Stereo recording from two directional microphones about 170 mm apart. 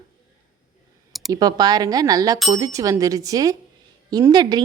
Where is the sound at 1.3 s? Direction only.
20° right (ahead or behind).